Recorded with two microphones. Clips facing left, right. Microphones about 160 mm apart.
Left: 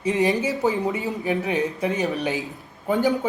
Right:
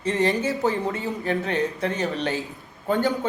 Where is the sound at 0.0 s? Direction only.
20° left (ahead or behind).